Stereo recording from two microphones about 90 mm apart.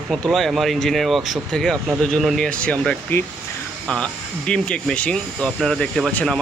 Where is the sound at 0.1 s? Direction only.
Centre (ahead or behind).